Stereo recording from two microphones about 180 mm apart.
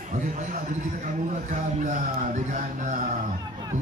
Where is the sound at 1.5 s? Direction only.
45° right (ahead or behind).